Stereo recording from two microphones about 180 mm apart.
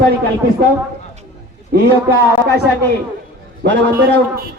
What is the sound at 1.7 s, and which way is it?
Speech, 60° right (ahead or behind).